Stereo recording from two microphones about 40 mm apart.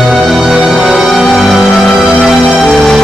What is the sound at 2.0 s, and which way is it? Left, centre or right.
Music, right.